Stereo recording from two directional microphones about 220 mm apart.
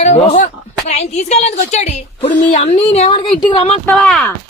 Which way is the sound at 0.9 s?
30° left (ahead or behind).